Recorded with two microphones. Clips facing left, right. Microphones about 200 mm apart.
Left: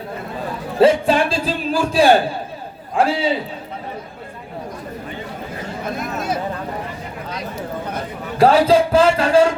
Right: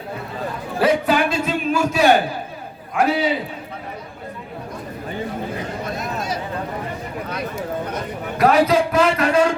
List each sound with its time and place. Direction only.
0.8 s a man's voice: 30° left (ahead or behind)
7.3 s a sound: 60° right (ahead or behind)
8.4 s a man's voice: 30° left (ahead or behind)